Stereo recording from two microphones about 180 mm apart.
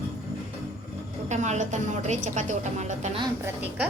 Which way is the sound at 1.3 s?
40° right (ahead or behind).